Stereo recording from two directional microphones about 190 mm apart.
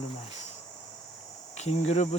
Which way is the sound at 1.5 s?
35° left (ahead or behind).